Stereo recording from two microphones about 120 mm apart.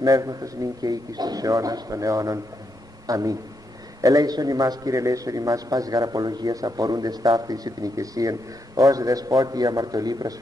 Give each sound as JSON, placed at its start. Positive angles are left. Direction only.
{"t": 0.0, "sound": "a man's voice", "side_deg": -30}